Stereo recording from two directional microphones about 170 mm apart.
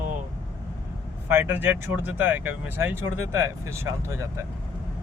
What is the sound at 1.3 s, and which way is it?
Speech, 10° right (ahead or behind).